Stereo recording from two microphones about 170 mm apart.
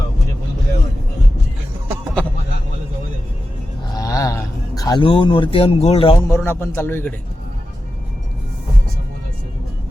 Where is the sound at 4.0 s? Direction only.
20° left (ahead or behind).